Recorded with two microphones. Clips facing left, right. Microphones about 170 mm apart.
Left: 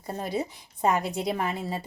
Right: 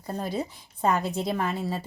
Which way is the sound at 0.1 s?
5° left (ahead or behind).